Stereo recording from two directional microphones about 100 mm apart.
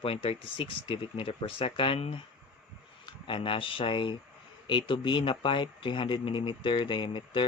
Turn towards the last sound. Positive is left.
turn(degrees=55)  # may be behind; listen again after turning